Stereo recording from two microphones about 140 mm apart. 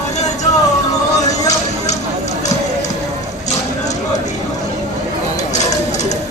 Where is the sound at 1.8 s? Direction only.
55° left (ahead or behind).